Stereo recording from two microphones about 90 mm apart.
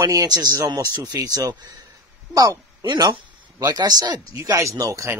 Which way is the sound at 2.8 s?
60° right (ahead or behind).